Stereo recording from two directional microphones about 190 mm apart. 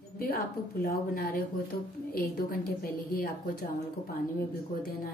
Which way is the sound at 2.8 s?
50° left (ahead or behind).